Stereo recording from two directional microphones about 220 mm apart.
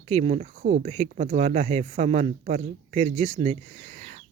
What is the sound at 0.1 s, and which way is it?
Speech, 30° right (ahead or behind).